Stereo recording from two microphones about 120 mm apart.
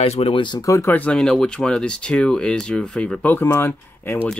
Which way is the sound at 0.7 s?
25° left (ahead or behind).